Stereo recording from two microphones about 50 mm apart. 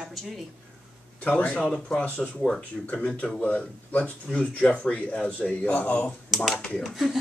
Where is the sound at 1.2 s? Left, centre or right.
Left.